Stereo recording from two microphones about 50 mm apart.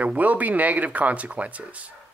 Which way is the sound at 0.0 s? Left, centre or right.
Right.